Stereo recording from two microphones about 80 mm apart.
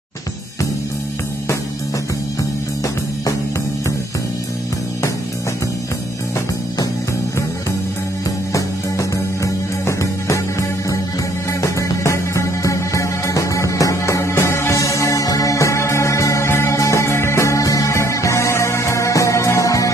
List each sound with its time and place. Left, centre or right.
8.5 s music: left
11.6 s music: left